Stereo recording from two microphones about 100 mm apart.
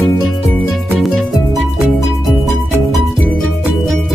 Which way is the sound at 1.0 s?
Centre (ahead or behind).